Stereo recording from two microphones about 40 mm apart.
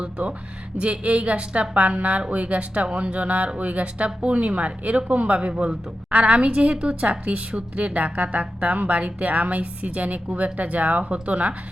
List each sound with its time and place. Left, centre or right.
0.0 s a woman's voice: right